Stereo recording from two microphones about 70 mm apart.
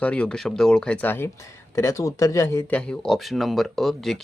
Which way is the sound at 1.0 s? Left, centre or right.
Left.